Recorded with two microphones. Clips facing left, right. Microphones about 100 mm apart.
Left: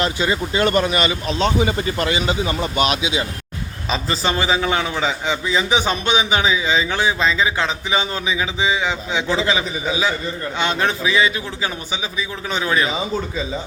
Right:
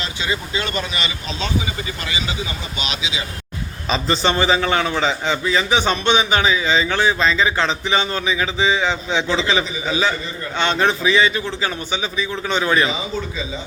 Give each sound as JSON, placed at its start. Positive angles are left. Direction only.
{"t": 0.0, "sound": "speech", "side_deg": 50}
{"t": 3.8, "sound": "a man's voice", "side_deg": 5}